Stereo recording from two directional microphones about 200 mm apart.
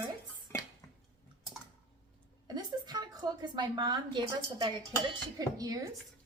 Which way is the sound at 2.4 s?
20° right (ahead or behind).